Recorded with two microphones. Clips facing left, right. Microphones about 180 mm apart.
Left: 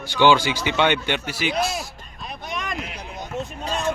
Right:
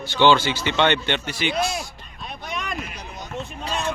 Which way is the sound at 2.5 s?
Centre (ahead or behind).